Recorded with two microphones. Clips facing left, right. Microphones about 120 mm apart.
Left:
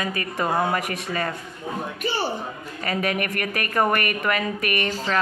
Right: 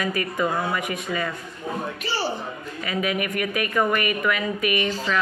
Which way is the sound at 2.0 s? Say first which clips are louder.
Left 3 dB; 50° left (ahead or behind).